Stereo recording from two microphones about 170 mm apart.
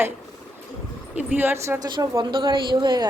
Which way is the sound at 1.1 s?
10° right (ahead or behind).